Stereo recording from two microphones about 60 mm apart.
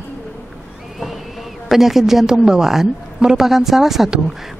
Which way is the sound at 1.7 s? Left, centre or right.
Centre.